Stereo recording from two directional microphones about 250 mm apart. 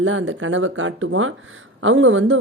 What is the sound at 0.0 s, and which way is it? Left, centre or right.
Speech, right.